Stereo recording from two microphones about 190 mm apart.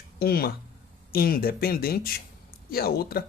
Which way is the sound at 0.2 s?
55° left (ahead or behind).